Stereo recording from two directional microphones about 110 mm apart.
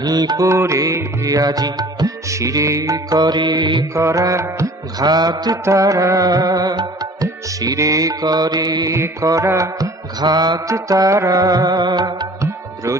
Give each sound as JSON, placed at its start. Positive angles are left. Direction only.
{"t": 0.0, "sound": "music", "side_deg": -35}
{"t": 3.9, "sound": "music", "side_deg": -30}